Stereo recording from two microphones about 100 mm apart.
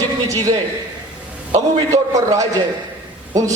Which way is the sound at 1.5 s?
35° right (ahead or behind).